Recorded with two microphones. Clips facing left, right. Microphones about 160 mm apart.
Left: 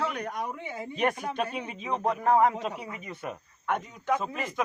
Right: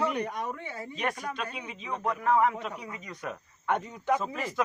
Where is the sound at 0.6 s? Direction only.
15° left (ahead or behind).